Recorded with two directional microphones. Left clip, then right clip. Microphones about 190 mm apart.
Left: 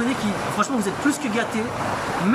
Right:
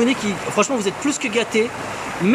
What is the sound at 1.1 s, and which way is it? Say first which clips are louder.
Speech: right 4 dB; 15° right (ahead or behind).